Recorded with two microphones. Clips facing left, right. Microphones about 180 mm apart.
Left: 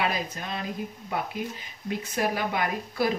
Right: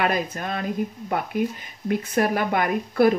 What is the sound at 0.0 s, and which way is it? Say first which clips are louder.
Speech: right 5 dB; 55° right (ahead or behind).